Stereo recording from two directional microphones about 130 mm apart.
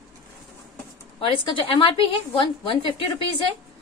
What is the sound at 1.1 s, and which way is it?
A woman's voice, 40° left (ahead or behind).